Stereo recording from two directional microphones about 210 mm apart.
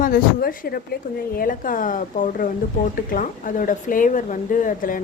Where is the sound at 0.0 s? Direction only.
40° left (ahead or behind).